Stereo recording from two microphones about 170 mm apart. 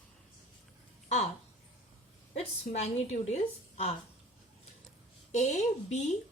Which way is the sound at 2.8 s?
40° left (ahead or behind).